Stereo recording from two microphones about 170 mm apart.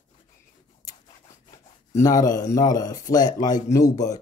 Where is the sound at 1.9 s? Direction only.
20° left (ahead or behind).